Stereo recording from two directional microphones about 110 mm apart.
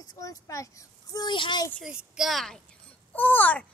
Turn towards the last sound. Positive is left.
turn(degrees=15)  # may be behind; listen again after turning